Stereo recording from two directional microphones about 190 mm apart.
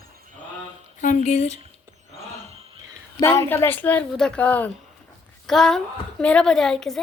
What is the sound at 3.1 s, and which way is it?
A woman's voice, 15° left (ahead or behind).